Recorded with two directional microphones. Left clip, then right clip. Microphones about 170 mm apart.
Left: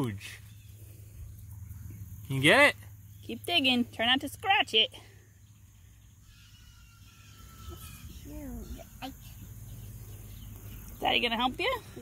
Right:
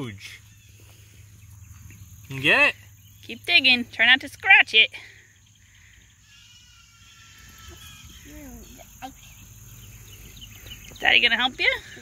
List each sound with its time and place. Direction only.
0.0 s speech: 15° left (ahead or behind)
2.2 s speech: 25° left (ahead or behind)
11.0 s speech: 5° left (ahead or behind)